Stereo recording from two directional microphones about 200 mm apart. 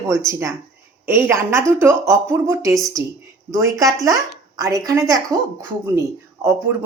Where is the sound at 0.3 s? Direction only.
15° right (ahead or behind).